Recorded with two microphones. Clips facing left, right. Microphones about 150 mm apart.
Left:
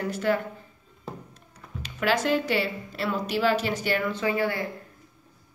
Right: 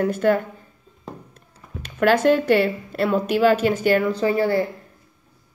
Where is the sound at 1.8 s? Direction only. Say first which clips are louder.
Right 8 dB; 60° right (ahead or behind); by 4.6 s 40° right (ahead or behind).